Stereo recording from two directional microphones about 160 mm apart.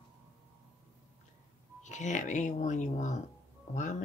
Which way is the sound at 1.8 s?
50° left (ahead or behind).